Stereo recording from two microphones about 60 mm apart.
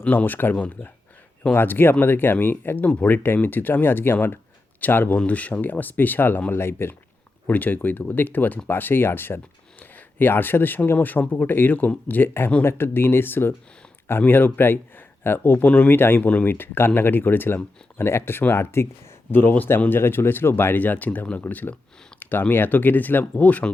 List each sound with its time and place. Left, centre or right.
0.0 s speech: left
1.5 s speech: left
2.8 s speech: left
3.2 s speech: left
5.1 s speech: left
7.4 s speech: left
19.3 s speech: left
20.7 s speech: left